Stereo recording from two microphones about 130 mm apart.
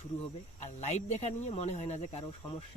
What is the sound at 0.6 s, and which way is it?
Speech, 60° left (ahead or behind).